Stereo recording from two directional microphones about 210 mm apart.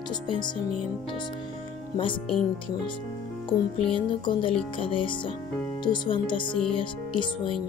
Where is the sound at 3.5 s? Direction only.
25° left (ahead or behind).